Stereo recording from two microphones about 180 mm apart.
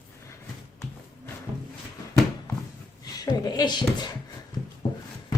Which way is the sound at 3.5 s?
25° left (ahead or behind).